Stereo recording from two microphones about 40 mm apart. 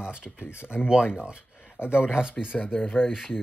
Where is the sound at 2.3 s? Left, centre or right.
Left.